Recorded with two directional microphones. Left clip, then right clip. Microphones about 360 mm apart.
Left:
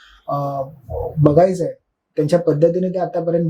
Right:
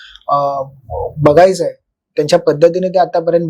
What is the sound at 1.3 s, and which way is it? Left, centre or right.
Speech, right.